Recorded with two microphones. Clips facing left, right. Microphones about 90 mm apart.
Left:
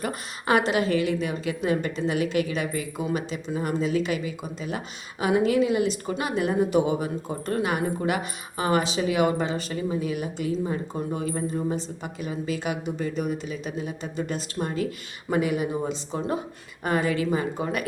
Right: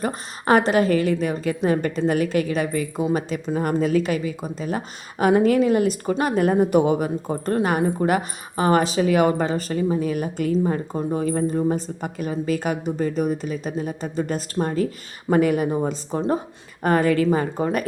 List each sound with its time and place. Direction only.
0.0 s a woman's voice: 40° right (ahead or behind)